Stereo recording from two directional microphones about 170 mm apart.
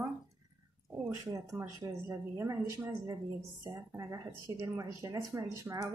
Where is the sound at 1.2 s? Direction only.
20° right (ahead or behind).